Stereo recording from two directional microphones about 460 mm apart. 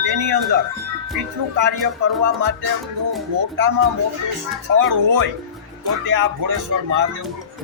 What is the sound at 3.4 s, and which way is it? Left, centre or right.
Speech, right.